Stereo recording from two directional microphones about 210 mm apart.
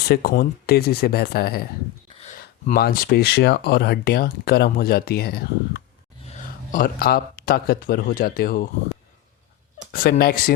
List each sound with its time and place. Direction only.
0.1 s speech: 45° left (ahead or behind)
9.9 s speech: 45° left (ahead or behind)